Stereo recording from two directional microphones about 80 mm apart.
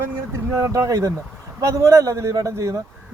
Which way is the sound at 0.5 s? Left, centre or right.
Right.